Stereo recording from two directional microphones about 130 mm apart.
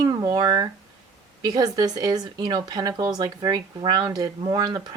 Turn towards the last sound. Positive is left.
turn(degrees=-30)  # may be behind; listen again after turning